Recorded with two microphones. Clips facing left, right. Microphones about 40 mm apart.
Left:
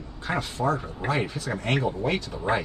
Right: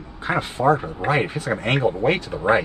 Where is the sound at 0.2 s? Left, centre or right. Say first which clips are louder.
Right 6 dB; right.